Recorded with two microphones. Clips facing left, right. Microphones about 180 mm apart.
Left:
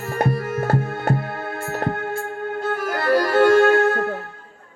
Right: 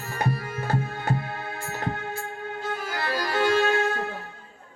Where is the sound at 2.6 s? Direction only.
60° left (ahead or behind).